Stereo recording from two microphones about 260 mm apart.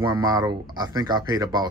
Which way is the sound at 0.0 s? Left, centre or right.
Centre.